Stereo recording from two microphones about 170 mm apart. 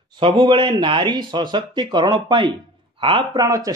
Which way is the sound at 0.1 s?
30° right (ahead or behind).